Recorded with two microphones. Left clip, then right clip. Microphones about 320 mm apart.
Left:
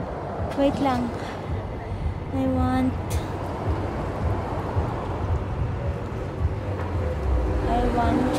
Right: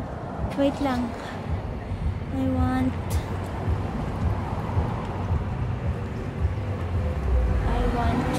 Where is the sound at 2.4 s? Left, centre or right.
Centre.